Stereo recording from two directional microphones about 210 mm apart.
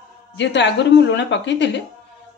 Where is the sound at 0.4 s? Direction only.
55° left (ahead or behind).